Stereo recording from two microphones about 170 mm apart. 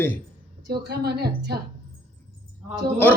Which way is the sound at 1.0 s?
70° right (ahead or behind).